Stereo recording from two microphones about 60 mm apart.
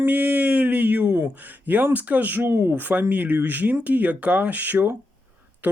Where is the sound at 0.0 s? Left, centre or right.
Right.